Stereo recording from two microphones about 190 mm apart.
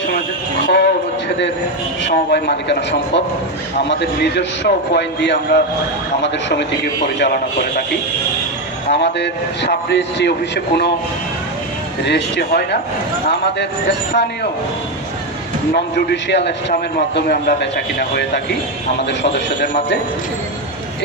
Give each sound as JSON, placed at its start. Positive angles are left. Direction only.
{"t": 0.7, "sound": "a sound", "side_deg": 60}
{"t": 2.0, "sound": "a man's voice", "side_deg": 60}
{"t": 8.9, "sound": "a man's voice", "side_deg": 65}
{"t": 12.0, "sound": "a man's voice", "side_deg": 60}
{"t": 15.7, "sound": "a man's voice", "side_deg": 55}